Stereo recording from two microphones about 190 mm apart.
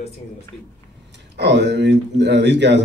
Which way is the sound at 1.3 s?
65° right (ahead or behind).